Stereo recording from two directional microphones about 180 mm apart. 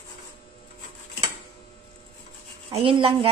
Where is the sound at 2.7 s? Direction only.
30° right (ahead or behind).